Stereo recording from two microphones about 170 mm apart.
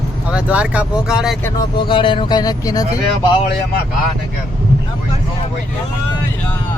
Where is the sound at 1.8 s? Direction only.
30° left (ahead or behind).